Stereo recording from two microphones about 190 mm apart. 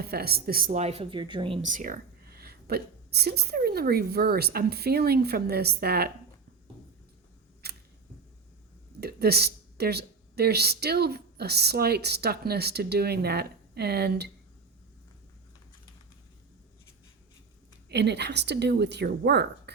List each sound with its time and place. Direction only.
0.0 s speech: 55° right (ahead or behind); by 1.5 s 25° right (ahead or behind)
1.6 s a woman's voice: 45° right (ahead or behind)
7.6 s camera: 60° right (ahead or behind)
9.0 s speech: 55° right (ahead or behind)
17.8 s a woman's voice: 60° right (ahead or behind)